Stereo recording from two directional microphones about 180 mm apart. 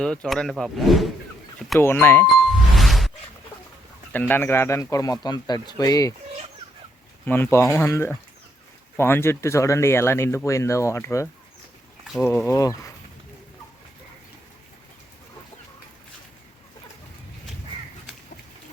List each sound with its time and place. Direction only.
0.0 s speech: 5° left (ahead or behind)
1.8 s speech: 10° left (ahead or behind)
2.5 s ding: centre (ahead or behind)
4.1 s speech: 10° left (ahead or behind)
7.3 s speech: 10° left (ahead or behind)
12.5 s speech: 20° left (ahead or behind)